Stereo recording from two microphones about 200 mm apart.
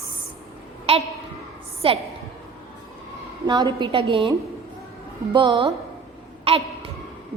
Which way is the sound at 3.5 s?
20° right (ahead or behind).